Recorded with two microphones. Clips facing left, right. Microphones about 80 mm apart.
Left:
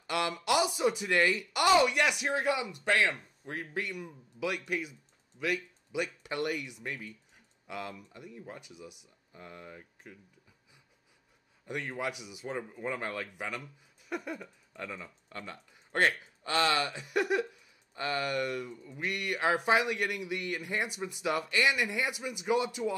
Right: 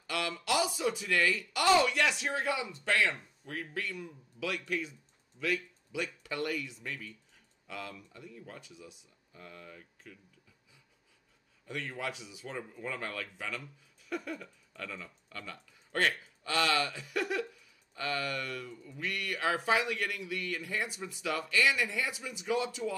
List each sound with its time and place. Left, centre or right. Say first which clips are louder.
0.0 s speech: left 4 dB; left
6.8 s speech: left 2 dB; left
8.5 s speech: left 2 dB; centre
9.3 s speech: left 2 dB; left
11.6 s speech: left 3 dB; centre
12.4 s speech: left 4 dB; left